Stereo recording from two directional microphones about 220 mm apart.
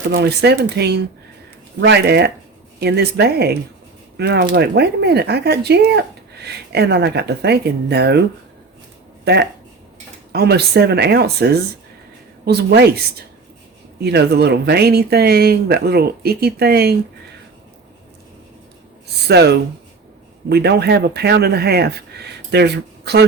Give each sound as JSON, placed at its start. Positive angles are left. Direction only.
{"t": 0.1, "sound": "speech", "side_deg": -45}
{"t": 9.2, "sound": "speech", "side_deg": -50}
{"t": 19.3, "sound": "speech", "side_deg": -50}